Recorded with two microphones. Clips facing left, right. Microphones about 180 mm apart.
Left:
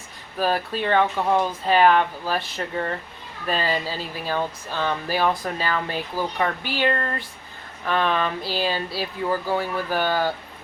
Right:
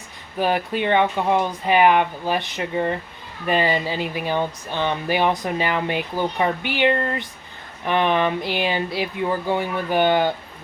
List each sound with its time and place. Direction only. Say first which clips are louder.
0.3 s speech: right 2 dB; 20° right (ahead or behind)